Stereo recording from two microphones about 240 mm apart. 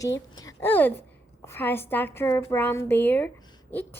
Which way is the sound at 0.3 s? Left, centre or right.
Centre.